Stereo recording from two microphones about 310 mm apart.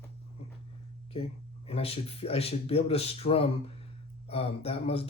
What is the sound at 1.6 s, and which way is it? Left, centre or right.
Speech, centre.